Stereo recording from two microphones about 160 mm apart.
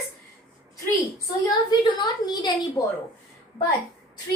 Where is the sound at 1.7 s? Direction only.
25° left (ahead or behind).